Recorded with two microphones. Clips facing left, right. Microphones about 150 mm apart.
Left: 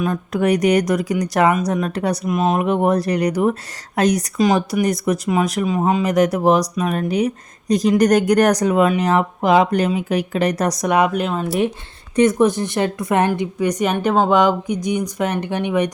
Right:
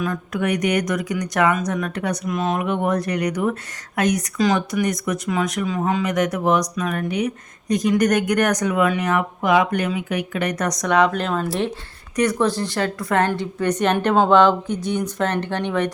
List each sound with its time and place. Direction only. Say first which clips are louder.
0.3 s speech: left 5 dB; 35° left (ahead or behind)
2.2 s speech: left 5 dB; 20° left (ahead or behind)
4.4 s speech: left 3 dB; 25° left (ahead or behind)
10.8 s a woman's voice: even; 15° left (ahead or behind)
12.1 s a woman's voice: left 5 dB; 20° left (ahead or behind)